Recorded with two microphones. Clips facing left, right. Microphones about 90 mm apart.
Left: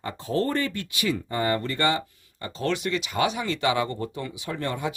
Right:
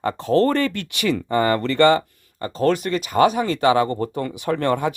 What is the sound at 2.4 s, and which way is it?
Speech, 40° right (ahead or behind).